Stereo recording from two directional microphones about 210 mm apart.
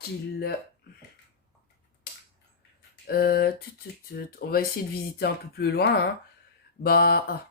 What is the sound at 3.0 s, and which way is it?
Speech, 50° left (ahead or behind).